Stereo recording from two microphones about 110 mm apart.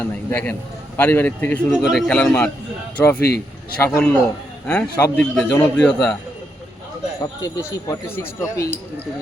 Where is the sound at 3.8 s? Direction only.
25° left (ahead or behind).